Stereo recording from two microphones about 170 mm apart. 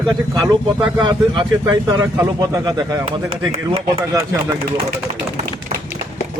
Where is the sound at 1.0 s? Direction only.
25° right (ahead or behind).